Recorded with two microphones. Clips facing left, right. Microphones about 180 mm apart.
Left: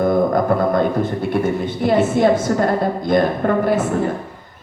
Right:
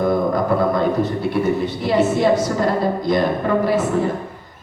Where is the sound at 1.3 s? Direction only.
50° left (ahead or behind).